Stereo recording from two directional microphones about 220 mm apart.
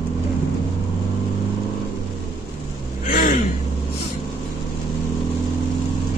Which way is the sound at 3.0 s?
35° left (ahead or behind).